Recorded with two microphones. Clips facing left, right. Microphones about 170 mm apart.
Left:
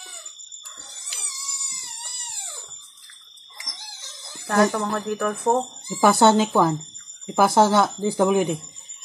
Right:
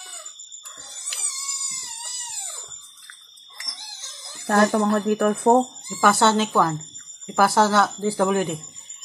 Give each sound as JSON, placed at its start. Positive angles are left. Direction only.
{"t": 4.5, "sound": "speech", "side_deg": -45}
{"t": 5.9, "sound": "speech", "side_deg": 15}